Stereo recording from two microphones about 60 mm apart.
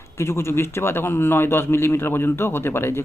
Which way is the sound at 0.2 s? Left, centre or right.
Left.